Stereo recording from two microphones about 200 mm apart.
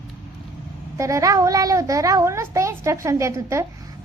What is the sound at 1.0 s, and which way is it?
A woman's voice, 15° right (ahead or behind).